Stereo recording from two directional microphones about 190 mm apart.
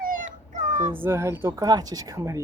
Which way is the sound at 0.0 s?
45° right (ahead or behind).